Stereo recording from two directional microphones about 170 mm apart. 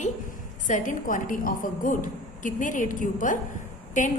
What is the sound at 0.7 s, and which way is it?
A woman's voice, 50° left (ahead or behind).